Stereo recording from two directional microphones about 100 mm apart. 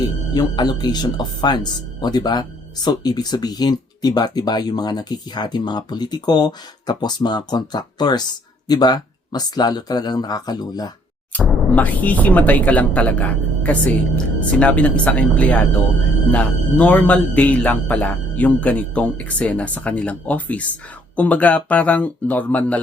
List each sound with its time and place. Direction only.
0.3 s speech: 45° left (ahead or behind)
11.3 s a man's voice: 15° left (ahead or behind)